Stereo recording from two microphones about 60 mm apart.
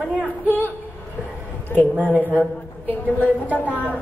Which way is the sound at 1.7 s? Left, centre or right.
Left.